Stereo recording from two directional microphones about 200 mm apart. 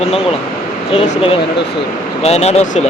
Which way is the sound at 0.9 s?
30° left (ahead or behind).